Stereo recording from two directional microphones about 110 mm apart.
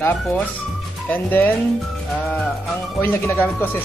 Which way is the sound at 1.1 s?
15° left (ahead or behind).